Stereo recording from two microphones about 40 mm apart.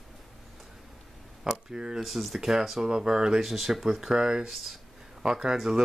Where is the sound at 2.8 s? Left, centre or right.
Centre.